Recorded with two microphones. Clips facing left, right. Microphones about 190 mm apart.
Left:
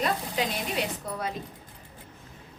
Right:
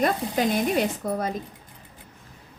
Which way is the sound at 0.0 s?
50° right (ahead or behind).